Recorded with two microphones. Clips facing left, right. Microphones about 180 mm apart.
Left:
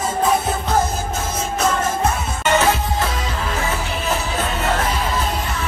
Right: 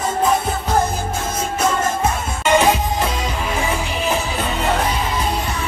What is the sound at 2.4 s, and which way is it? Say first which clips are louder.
Music: right 2 dB; 15° right (ahead or behind).